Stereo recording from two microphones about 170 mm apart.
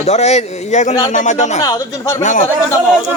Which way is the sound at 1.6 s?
20° left (ahead or behind).